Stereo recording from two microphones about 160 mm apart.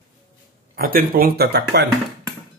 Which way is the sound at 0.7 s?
65° right (ahead or behind).